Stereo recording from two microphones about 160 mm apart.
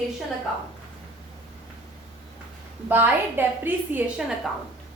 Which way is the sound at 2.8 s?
10° right (ahead or behind).